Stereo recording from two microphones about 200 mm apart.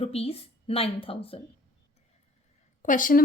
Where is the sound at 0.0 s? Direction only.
30° left (ahead or behind).